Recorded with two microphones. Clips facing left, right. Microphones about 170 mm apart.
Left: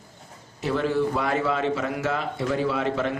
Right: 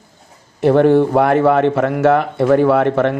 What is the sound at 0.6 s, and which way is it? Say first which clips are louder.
Speech: right 13 dB; 60° right (ahead or behind).